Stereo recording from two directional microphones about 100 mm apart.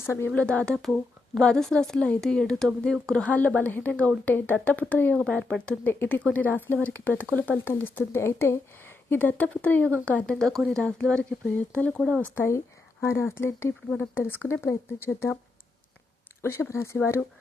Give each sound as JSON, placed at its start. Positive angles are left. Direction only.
{"t": 0.0, "sound": "speech", "side_deg": 25}
{"t": 0.3, "sound": "speech", "side_deg": 10}
{"t": 5.9, "sound": "speech", "side_deg": 20}
{"t": 12.2, "sound": "speech", "side_deg": 25}
{"t": 16.4, "sound": "speech", "side_deg": 25}